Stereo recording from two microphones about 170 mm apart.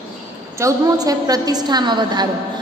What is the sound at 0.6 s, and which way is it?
A woman's voice, 20° right (ahead or behind).